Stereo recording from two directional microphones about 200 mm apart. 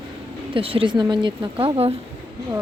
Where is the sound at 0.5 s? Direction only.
25° right (ahead or behind).